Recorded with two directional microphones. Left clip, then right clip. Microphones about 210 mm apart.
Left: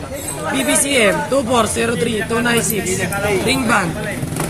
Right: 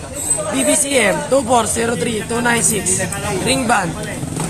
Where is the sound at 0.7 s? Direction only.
35° right (ahead or behind).